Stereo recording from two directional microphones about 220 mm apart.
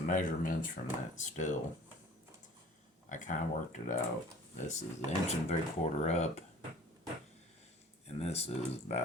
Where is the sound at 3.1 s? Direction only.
35° left (ahead or behind).